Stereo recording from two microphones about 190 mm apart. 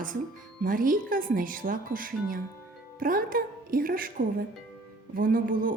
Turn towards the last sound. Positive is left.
turn(degrees=-50)  # may be behind; listen again after turning